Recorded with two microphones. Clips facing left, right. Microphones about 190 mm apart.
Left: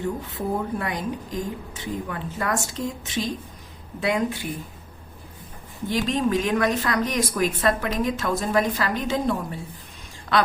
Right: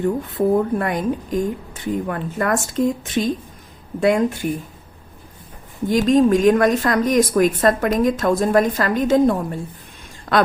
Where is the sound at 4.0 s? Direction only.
45° right (ahead or behind).